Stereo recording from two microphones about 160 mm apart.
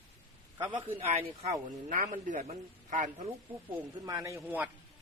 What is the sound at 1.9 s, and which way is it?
A man's voice, 55° right (ahead or behind).